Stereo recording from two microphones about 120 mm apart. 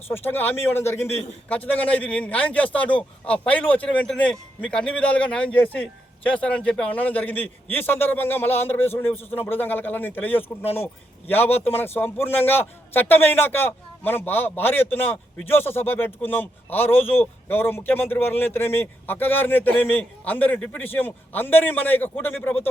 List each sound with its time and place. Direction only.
0.1 s a man's voice: 20° left (ahead or behind)